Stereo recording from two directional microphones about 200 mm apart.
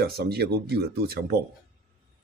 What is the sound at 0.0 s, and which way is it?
Speech, 55° right (ahead or behind).